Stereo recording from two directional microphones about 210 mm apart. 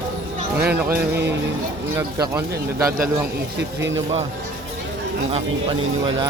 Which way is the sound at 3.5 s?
55° right (ahead or behind).